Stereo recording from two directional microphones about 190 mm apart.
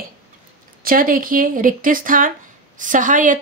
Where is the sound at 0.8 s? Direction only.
45° right (ahead or behind).